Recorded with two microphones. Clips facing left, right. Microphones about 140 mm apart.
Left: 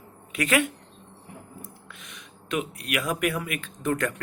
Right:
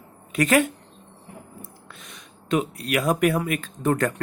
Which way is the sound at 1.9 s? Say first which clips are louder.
Right 1 dB; 35° right (ahead or behind).